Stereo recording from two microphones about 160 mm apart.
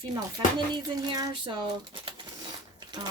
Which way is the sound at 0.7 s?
25° right (ahead or behind).